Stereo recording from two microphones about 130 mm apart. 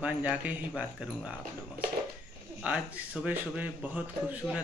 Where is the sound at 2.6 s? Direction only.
10° right (ahead or behind).